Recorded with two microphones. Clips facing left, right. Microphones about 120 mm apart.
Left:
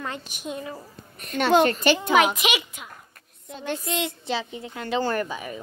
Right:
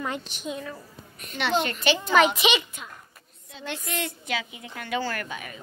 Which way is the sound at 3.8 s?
25° left (ahead or behind).